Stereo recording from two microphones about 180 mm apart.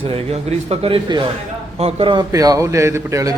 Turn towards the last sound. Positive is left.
turn(degrees=-15)  # may be behind; listen again after turning